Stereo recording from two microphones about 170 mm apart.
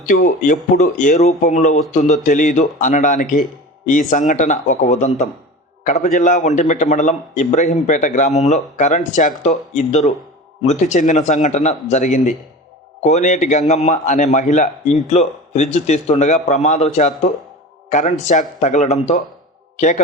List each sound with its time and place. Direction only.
0.0 s a man's voice: 50° left (ahead or behind)